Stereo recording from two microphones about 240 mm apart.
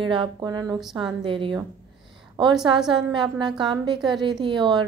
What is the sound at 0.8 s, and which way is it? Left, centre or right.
Speech, centre.